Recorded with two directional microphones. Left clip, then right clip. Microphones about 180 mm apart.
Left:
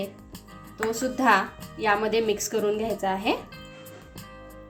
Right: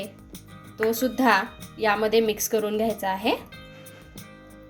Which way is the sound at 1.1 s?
30° right (ahead or behind).